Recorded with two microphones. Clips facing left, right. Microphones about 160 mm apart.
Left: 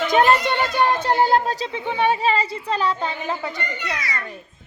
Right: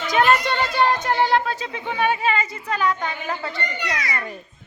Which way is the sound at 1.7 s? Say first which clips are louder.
Left 2 dB; 20° left (ahead or behind).